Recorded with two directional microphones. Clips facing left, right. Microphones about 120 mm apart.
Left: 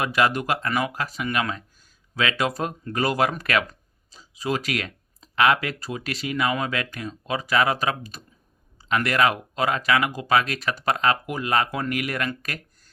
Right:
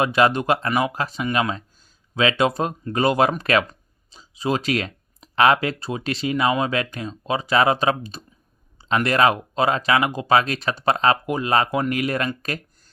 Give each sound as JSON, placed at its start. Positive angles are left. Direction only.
{"t": 0.0, "sound": "speech", "side_deg": -25}